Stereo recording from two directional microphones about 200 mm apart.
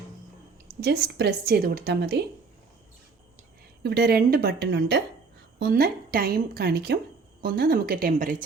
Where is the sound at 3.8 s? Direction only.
55° right (ahead or behind).